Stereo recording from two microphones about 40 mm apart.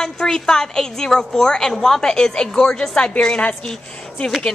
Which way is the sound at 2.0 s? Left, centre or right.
Centre.